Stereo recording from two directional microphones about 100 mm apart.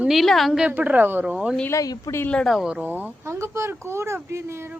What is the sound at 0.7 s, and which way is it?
Speech, 20° right (ahead or behind).